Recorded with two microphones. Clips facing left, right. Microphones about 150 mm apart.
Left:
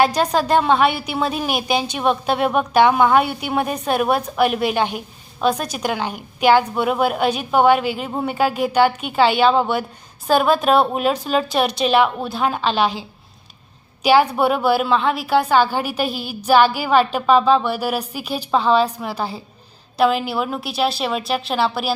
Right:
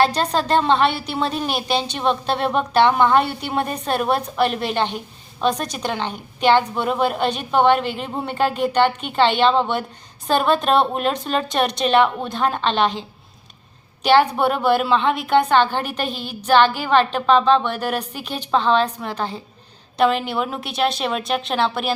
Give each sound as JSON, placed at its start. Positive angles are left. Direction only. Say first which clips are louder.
{"t": 0.0, "sound": "a woman's voice", "louder": "left 2 dB", "side_deg": 10}